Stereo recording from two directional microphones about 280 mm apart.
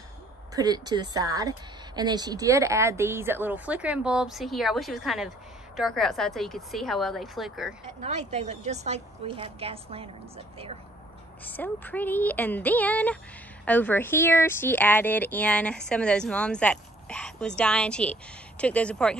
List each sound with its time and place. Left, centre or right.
0.6 s speech: centre
8.0 s a woman's voice: right
11.4 s speech: centre